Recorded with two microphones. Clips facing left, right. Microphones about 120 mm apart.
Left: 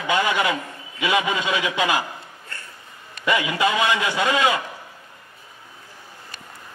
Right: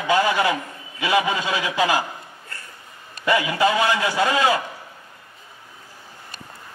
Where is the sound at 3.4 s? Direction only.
20° left (ahead or behind).